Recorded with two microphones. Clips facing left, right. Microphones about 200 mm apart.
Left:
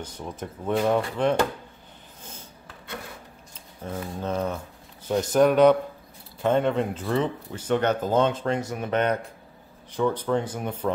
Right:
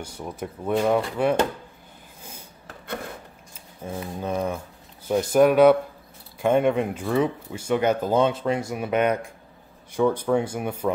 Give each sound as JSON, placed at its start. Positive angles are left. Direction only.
{"t": 0.0, "sound": "speech", "side_deg": -10}
{"t": 3.8, "sound": "speech", "side_deg": -10}